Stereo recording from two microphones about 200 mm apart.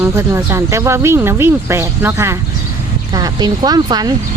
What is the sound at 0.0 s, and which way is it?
Speech, 10° right (ahead or behind).